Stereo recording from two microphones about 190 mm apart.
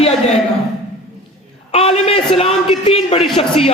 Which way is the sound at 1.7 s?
30° left (ahead or behind).